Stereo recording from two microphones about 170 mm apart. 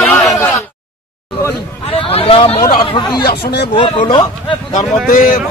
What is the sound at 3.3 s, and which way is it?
Speech, 70° left (ahead or behind).